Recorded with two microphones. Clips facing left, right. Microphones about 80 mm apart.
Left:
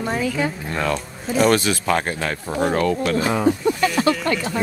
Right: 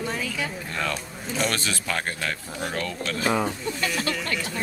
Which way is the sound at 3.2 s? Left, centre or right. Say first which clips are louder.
Left 2 dB; centre.